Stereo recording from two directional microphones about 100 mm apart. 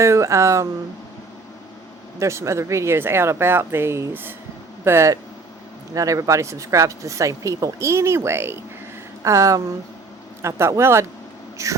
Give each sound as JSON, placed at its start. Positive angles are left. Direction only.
{"t": 0.0, "sound": "speech", "side_deg": -30}
{"t": 2.1, "sound": "speech", "side_deg": -30}